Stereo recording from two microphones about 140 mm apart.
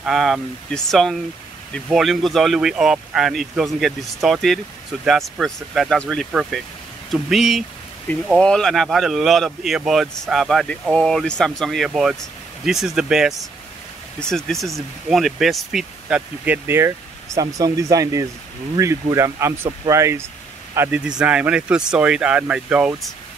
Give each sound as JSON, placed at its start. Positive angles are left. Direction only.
{"t": 0.0, "sound": "speech", "side_deg": 0}